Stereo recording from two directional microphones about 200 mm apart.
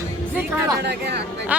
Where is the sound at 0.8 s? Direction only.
55° right (ahead or behind).